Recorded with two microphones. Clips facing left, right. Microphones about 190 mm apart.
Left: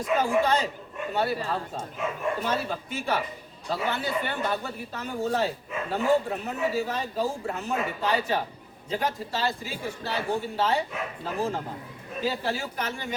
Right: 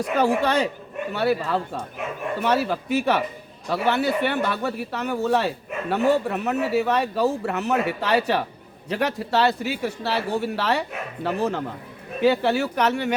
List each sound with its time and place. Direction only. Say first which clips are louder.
0.0 s a man's voice: right 3 dB; 70° right (ahead or behind)